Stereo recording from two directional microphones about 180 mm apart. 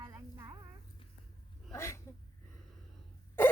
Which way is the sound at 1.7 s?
15° left (ahead or behind).